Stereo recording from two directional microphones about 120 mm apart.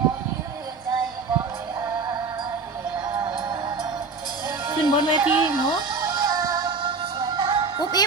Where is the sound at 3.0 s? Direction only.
15° right (ahead or behind).